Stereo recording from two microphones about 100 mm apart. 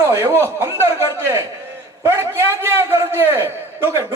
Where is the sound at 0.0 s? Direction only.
35° right (ahead or behind).